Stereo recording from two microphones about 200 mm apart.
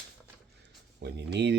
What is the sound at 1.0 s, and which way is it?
Speech, 60° right (ahead or behind).